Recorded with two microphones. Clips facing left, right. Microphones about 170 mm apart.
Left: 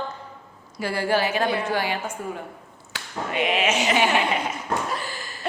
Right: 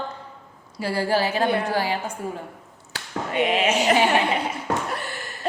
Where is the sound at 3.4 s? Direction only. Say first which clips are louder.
Right 1 dB; 35° right (ahead or behind).